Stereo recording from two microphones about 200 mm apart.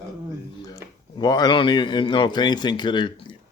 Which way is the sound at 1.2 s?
20° left (ahead or behind).